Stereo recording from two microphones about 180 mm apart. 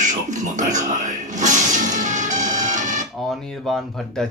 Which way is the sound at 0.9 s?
45° right (ahead or behind).